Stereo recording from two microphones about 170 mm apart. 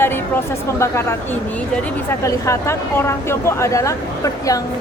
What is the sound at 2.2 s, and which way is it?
Speech, 20° left (ahead or behind).